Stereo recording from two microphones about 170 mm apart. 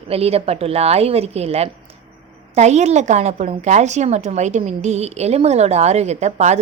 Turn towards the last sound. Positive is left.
turn(degrees=-40)  # may be behind; listen again after turning